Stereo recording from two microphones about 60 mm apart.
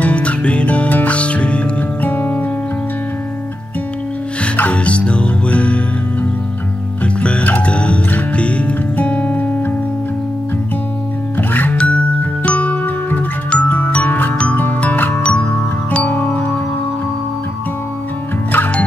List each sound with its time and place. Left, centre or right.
0.0 s music: left
4.6 s music: left
7.2 s music: left
11.3 s music: left
11.7 s music: centre
15.2 s music: centre
16.2 s music: left
18.5 s music: left